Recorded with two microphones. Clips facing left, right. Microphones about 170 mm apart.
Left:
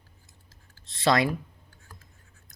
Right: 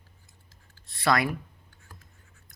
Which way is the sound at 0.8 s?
20° left (ahead or behind).